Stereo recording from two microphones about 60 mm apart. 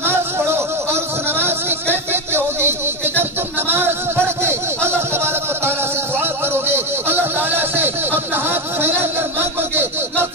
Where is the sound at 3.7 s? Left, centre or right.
Right.